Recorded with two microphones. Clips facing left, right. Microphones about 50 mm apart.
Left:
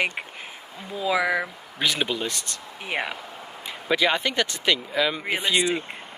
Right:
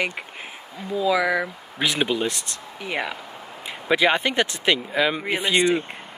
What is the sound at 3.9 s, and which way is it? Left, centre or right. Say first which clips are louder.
Speech: right 3 dB; centre.